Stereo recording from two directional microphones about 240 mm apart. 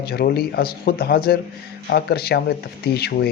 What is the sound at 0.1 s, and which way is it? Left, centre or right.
Speech, left.